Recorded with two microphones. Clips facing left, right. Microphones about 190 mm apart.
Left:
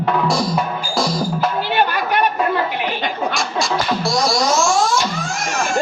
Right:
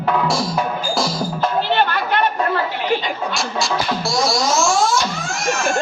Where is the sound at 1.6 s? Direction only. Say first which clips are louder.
Even; 10° left (ahead or behind).